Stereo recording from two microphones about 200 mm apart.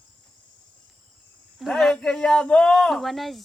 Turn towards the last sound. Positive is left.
turn(degrees=0)  # may be behind; listen again after turning